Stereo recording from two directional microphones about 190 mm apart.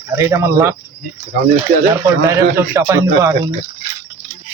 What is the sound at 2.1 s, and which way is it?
Speech, 15° right (ahead or behind).